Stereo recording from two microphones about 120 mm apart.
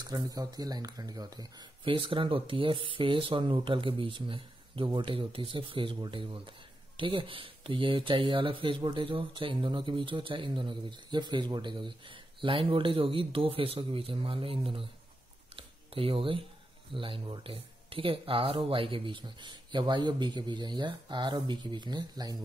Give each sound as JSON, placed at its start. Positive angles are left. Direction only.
{"t": 0.0, "sound": "speech", "side_deg": -35}
{"t": 1.9, "sound": "speech", "side_deg": -45}
{"t": 15.5, "sound": "a sound", "side_deg": -50}
{"t": 16.9, "sound": "speech", "side_deg": -45}